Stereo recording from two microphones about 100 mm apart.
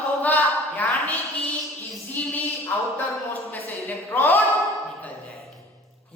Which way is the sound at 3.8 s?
25° left (ahead or behind).